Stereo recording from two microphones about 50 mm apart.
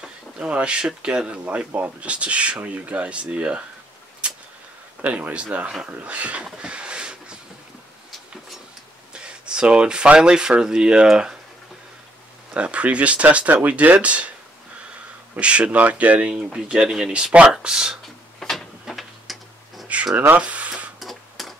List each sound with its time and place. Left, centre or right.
0.0 s speech: right
4.2 s a sound: right
5.0 s speech: right
6.4 s a sound: right
9.1 s speech: centre
12.5 s speech: right
15.3 s speech: right
16.5 s speech: centre
18.4 s a sound: centre
18.9 s printer: centre
20.2 s speech: right
21.0 s typewriter: centre